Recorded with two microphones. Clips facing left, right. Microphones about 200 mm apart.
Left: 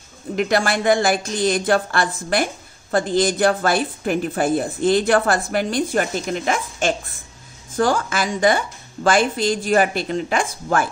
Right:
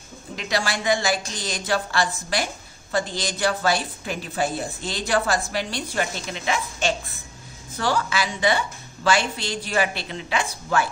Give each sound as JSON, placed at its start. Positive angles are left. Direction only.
{"t": 0.4, "sound": "speech", "side_deg": 55}